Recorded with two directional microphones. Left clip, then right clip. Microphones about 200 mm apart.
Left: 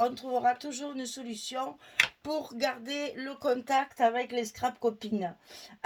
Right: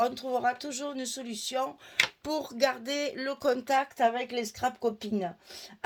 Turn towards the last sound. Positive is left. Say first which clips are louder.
# even
turn(degrees=-40)  # may be behind; listen again after turning